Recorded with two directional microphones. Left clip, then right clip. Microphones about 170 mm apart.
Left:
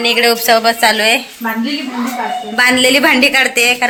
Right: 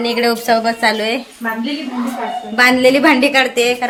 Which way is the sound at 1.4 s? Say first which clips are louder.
Left 2 dB; 40° left (ahead or behind).